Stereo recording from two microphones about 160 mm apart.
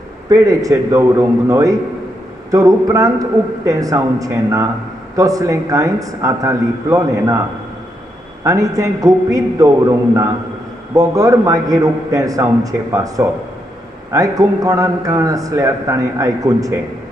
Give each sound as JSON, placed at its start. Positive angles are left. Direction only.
{"t": 0.3, "sound": "a man's voice", "side_deg": -20}
{"t": 8.5, "sound": "a man's voice", "side_deg": -20}
{"t": 11.0, "sound": "a man's voice", "side_deg": -20}